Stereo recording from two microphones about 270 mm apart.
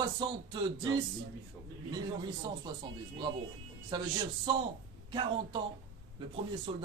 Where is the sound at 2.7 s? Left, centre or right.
Centre.